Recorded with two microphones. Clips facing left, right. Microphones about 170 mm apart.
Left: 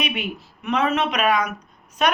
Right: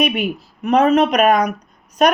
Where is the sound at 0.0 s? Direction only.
40° right (ahead or behind).